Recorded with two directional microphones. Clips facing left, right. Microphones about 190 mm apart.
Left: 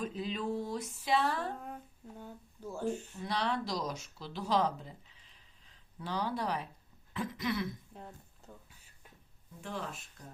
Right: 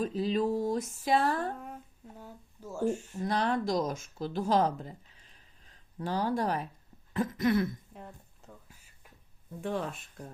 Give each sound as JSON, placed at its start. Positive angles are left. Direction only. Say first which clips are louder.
{"t": 0.0, "sound": "speech", "louder": "right 7 dB", "side_deg": -35}
{"t": 2.1, "sound": "speech", "louder": "left 1 dB", "side_deg": -5}
{"t": 3.1, "sound": "speech", "louder": "right 5 dB", "side_deg": -45}
{"t": 9.6, "sound": "speech", "louder": "right 8 dB", "side_deg": -55}